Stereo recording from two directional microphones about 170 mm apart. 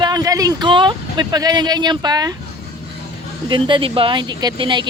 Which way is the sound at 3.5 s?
30° right (ahead or behind).